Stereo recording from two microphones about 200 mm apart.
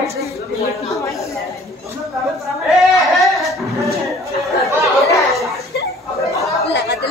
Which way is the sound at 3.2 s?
Centre (ahead or behind).